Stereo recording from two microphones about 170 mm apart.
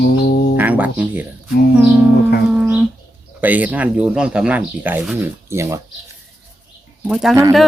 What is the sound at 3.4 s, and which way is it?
Speech, 10° right (ahead or behind).